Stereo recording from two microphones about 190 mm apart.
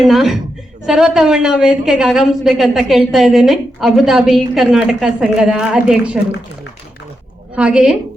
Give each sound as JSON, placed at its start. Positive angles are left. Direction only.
{"t": 0.0, "sound": "a woman's voice", "side_deg": 0}
{"t": 7.5, "sound": "a woman's voice", "side_deg": -5}